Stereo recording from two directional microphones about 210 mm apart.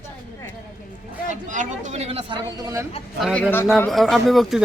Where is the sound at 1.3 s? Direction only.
35° right (ahead or behind); by 2.8 s 20° right (ahead or behind).